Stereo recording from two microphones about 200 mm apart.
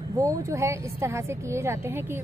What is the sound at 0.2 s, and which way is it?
A woman's voice, 15° right (ahead or behind).